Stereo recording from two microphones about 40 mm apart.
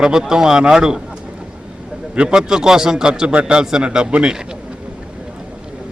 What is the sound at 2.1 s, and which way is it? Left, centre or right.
A man's voice, centre.